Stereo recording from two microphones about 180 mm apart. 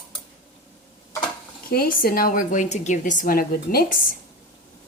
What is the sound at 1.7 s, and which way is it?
Speech, 55° left (ahead or behind).